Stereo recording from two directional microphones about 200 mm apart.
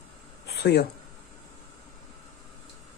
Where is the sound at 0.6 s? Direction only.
55° left (ahead or behind).